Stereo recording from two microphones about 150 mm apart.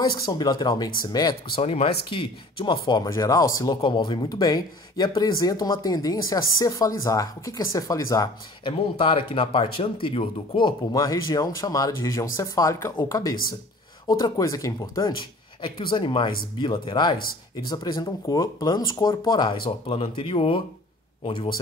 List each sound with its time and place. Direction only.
0.0 s speech: 25° left (ahead or behind)
1.6 s speech: 40° left (ahead or behind); by 8.3 s 20° left (ahead or behind)
8.6 s speech: 35° left (ahead or behind)
15.9 s speech: 35° left (ahead or behind)
19.9 s a man's voice: 40° left (ahead or behind)